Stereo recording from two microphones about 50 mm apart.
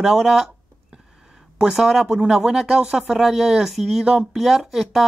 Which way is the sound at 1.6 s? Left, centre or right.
Centre.